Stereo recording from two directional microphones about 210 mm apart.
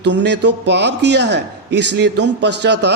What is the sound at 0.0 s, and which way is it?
Speech, 55° right (ahead or behind).